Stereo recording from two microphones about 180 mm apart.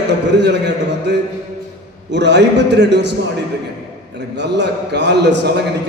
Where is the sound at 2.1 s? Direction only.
70° right (ahead or behind).